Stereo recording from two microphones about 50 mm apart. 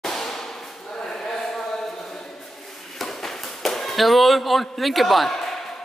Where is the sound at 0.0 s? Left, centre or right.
Centre.